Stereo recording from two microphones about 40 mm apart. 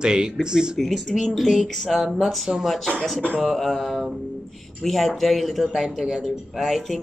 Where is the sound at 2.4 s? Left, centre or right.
Centre.